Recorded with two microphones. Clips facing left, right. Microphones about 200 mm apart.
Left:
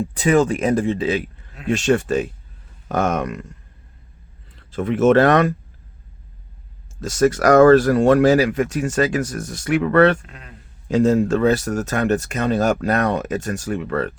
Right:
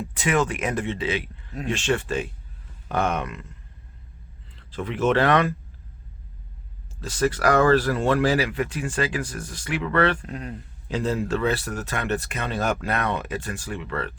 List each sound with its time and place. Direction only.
0.0 s speech: 35° left (ahead or behind)
4.5 s speech: 45° left (ahead or behind)
7.0 s speech: 45° left (ahead or behind)
10.2 s a man's voice: 40° right (ahead or behind)
10.8 s speech: 45° left (ahead or behind)